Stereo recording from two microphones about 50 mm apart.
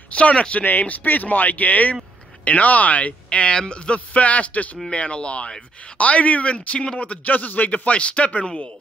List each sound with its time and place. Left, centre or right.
0.1 s speech: left